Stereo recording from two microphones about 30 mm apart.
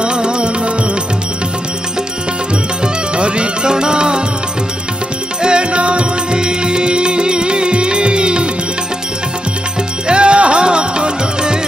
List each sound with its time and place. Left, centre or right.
0.0 s music: right
2.8 s music: right
5.4 s music: right
6.4 s music: right
10.0 s music: right